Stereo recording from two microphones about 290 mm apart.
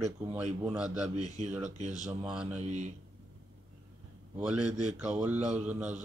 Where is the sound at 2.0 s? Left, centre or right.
Centre.